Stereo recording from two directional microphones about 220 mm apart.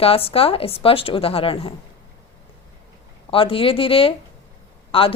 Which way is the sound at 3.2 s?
25° left (ahead or behind).